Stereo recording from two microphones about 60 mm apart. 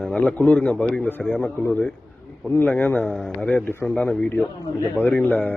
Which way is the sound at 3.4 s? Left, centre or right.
Centre.